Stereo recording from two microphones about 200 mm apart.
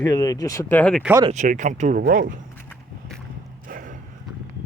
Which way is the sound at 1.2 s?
35° right (ahead or behind).